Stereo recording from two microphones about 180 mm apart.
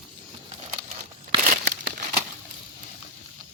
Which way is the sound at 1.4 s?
55° right (ahead or behind).